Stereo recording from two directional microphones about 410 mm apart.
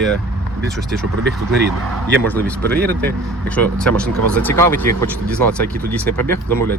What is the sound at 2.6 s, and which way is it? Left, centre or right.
Speech, right.